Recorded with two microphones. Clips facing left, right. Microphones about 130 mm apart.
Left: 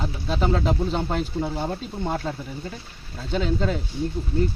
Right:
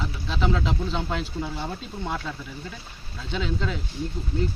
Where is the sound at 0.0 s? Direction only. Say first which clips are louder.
Left 3 dB; 40° left (ahead or behind).